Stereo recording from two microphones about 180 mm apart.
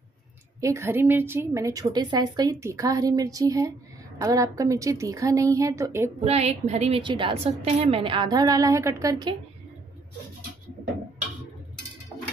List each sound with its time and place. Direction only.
0.6 s a woman's voice: 15° right (ahead or behind)
6.2 s a woman's voice: 35° right (ahead or behind); by 9.3 s 20° right (ahead or behind)